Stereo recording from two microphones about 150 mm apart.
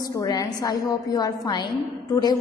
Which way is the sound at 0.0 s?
25° left (ahead or behind).